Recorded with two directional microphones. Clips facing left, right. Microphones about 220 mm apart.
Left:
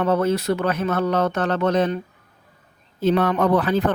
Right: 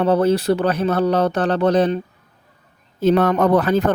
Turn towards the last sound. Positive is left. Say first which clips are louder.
# right 3 dB
turn(degrees=-45)  # may be behind; listen again after turning